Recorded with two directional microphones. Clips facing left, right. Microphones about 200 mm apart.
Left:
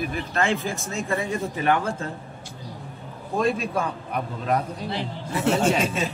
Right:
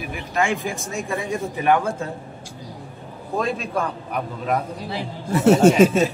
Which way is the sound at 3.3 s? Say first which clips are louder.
Left 1 dB; centre (ahead or behind).